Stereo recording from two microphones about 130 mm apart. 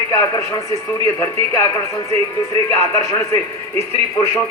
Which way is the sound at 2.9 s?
20° left (ahead or behind).